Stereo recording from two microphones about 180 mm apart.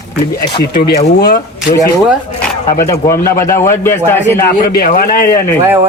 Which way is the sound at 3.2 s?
15° left (ahead or behind).